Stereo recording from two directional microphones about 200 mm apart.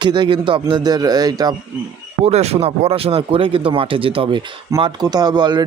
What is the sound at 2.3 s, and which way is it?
Speech, 30° right (ahead or behind).